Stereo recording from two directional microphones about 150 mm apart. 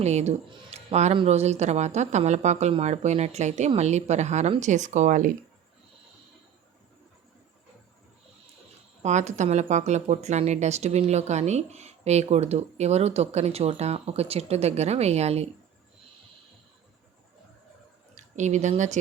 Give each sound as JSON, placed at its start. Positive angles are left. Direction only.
{"t": 0.0, "sound": "speech", "side_deg": -45}
{"t": 9.0, "sound": "speech", "side_deg": -50}
{"t": 18.1, "sound": "speech", "side_deg": -50}